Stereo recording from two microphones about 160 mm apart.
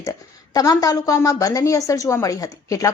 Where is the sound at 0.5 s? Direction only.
25° left (ahead or behind).